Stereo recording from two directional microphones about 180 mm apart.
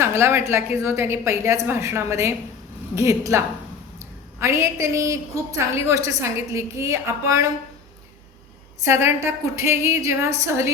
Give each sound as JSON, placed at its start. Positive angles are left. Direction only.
{"t": 0.0, "sound": "a woman's voice", "side_deg": -15}
{"t": 8.8, "sound": "a woman's voice", "side_deg": -15}